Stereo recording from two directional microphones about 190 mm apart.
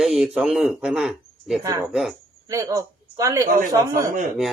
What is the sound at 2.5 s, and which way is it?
A man's voice, 15° right (ahead or behind).